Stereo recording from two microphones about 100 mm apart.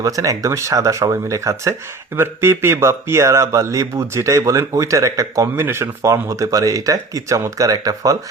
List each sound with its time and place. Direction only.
0.0 s speech: 35° right (ahead or behind)